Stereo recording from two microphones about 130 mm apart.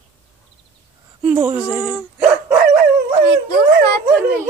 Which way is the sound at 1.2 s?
15° right (ahead or behind).